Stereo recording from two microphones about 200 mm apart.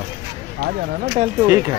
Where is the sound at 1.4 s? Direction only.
15° right (ahead or behind).